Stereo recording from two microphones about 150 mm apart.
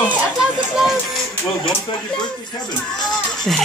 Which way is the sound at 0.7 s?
Centre (ahead or behind).